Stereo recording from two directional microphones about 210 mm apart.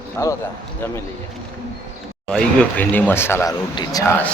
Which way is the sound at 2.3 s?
5° left (ahead or behind).